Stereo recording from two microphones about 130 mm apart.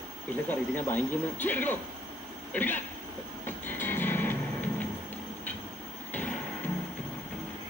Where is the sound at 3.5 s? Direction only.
15° left (ahead or behind).